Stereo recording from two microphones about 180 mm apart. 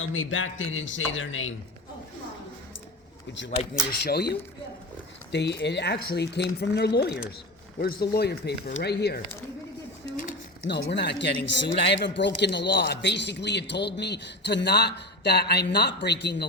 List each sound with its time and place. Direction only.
0.0 s a man's voice: 90° left
4.0 s a man's voice: 65° left (ahead or behind)
7.8 s speech: 55° left (ahead or behind)
10.2 s a sound: 45° left (ahead or behind)
10.7 s a man's voice: 65° left (ahead or behind)